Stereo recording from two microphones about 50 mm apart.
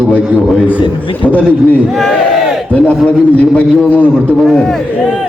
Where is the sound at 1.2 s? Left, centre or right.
Left.